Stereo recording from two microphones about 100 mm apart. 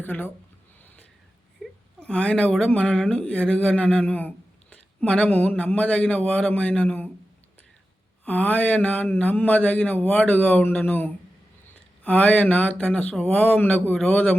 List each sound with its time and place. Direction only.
0.0 s speech: 15° left (ahead or behind)
1.6 s whimper: centre (ahead or behind)
2.0 s speech: 10° left (ahead or behind)
8.2 s speech: 15° left (ahead or behind)